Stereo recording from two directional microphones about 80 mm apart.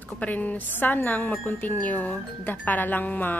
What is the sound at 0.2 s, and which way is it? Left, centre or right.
A woman's voice, left.